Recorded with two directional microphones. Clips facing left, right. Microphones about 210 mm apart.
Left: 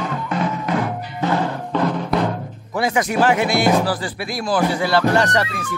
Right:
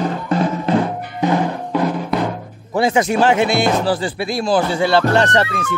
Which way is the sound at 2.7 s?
25° right (ahead or behind).